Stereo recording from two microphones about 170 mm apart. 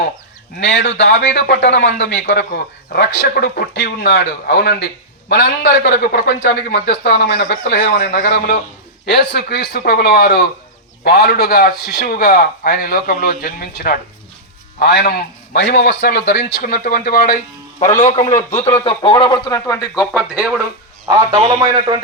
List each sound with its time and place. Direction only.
0.6 s a man's voice: 80° left
9.3 s a man's voice: 70° left (ahead or behind)
15.8 s speech: 65° left (ahead or behind)
17.7 s a man's voice: 45° left (ahead or behind); by 20.1 s 15° left (ahead or behind)
20.1 s speech: 10° right (ahead or behind)
21.3 s a man's voice: 30° right (ahead or behind)